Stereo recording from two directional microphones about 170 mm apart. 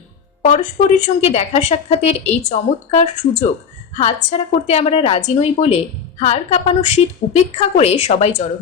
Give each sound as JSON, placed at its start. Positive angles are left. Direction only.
{"t": 0.4, "sound": "a woman's voice", "side_deg": 45}